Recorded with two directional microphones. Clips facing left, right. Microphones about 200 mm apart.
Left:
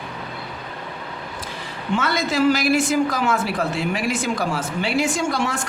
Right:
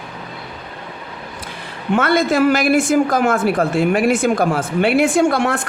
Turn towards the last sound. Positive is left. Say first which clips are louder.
# right 7 dB
turn(degrees=-60)  # may be behind; listen again after turning